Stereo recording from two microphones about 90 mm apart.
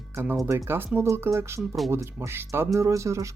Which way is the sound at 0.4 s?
25° right (ahead or behind).